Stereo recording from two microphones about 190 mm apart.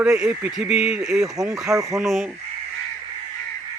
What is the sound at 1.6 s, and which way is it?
Speech, 15° right (ahead or behind).